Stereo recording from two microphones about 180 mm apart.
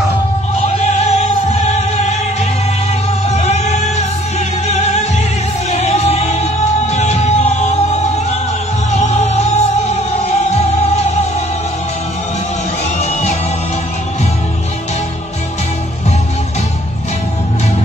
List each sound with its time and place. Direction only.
0.9 s music: 35° left (ahead or behind)
3.3 s music: 40° left (ahead or behind)
13.0 s music: 40° left (ahead or behind)